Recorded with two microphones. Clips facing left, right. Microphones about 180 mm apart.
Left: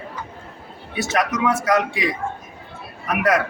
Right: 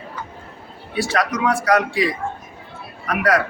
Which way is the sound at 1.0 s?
20° left (ahead or behind).